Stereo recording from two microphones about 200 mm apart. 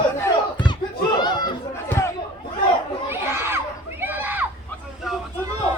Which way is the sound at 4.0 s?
10° right (ahead or behind).